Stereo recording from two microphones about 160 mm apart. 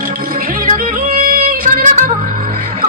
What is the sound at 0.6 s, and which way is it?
Music, 60° right (ahead or behind).